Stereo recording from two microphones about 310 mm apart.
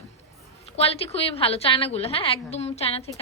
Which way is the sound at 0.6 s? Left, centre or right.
Centre.